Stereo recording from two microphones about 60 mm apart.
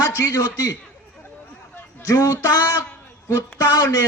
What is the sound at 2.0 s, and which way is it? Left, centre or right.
Speech, left.